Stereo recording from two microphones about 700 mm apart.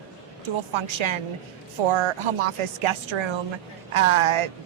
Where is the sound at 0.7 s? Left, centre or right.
Right.